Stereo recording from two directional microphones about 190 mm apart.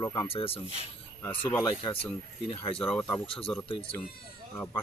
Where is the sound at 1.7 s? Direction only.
25° left (ahead or behind).